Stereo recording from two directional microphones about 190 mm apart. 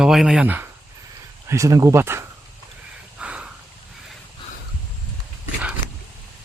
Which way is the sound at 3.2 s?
5° right (ahead or behind).